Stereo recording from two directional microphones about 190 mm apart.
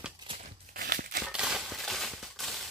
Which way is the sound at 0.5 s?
50° right (ahead or behind).